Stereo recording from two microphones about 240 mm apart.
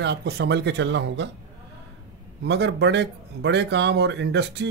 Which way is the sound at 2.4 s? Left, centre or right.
Right.